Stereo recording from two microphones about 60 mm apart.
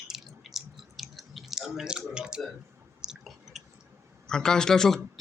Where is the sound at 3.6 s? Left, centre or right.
Centre.